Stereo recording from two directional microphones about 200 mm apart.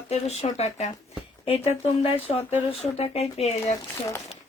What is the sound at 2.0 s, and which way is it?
Speech, 30° left (ahead or behind).